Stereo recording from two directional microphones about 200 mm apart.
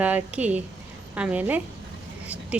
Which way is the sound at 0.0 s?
5° right (ahead or behind).